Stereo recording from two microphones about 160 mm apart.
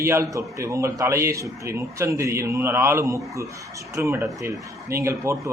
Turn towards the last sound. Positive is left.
turn(degrees=-15)  # may be behind; listen again after turning